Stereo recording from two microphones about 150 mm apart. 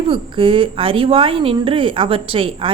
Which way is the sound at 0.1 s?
35° right (ahead or behind).